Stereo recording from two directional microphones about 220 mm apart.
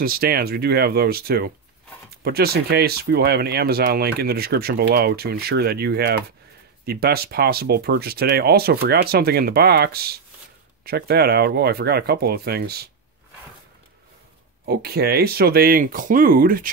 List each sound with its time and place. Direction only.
0.0 s speech: 45° right (ahead or behind)
14.7 s speech: 45° right (ahead or behind)